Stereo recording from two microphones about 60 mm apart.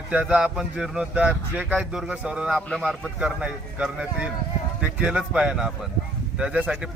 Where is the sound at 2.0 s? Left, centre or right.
Centre.